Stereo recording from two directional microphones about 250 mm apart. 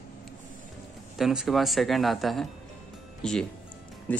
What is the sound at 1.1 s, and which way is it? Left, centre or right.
Speech, centre.